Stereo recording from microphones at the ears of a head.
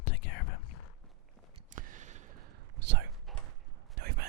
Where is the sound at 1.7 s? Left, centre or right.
Right.